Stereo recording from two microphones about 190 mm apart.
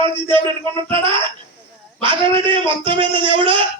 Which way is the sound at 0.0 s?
25° right (ahead or behind).